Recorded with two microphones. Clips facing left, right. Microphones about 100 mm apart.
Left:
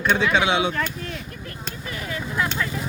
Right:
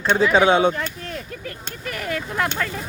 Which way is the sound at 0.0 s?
35° right (ahead or behind).